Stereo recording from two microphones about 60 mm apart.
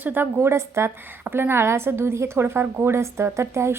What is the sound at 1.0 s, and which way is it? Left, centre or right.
A woman's voice, right.